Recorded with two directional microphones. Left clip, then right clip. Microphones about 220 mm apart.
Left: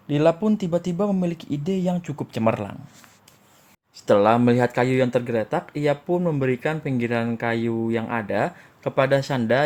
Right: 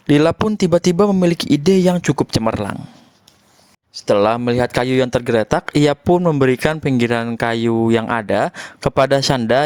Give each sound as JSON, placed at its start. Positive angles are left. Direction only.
{"t": 0.1, "sound": "speech", "side_deg": -50}
{"t": 3.9, "sound": "speech", "side_deg": -20}
{"t": 4.2, "sound": "speech", "side_deg": -35}